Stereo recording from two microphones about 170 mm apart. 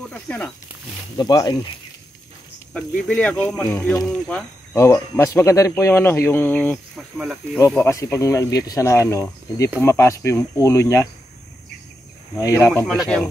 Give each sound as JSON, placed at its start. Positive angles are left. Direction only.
{"t": 0.1, "sound": "speech", "side_deg": 5}
{"t": 1.1, "sound": "speech", "side_deg": 25}
{"t": 2.7, "sound": "speech", "side_deg": 5}
{"t": 4.7, "sound": "speech", "side_deg": 15}
{"t": 7.0, "sound": "speech", "side_deg": 0}
{"t": 7.5, "sound": "speech", "side_deg": 15}
{"t": 12.4, "sound": "speech", "side_deg": 20}